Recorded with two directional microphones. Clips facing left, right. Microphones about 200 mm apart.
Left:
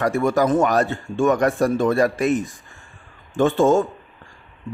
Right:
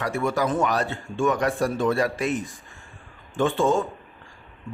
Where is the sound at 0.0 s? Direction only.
45° left (ahead or behind).